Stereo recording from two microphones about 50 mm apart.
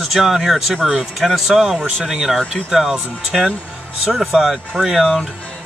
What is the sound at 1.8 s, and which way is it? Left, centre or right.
Speech, centre.